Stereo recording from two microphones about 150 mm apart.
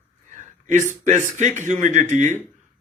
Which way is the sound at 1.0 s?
55° right (ahead or behind).